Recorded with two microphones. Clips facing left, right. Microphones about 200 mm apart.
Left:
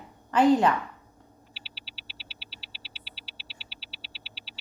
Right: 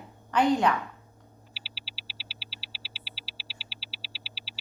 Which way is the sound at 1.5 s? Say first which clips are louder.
Even; centre (ahead or behind).